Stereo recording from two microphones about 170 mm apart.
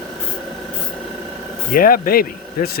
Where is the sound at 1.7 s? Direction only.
55° left (ahead or behind).